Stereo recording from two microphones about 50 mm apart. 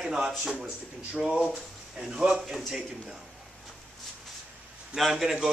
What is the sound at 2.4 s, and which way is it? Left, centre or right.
Speech, centre.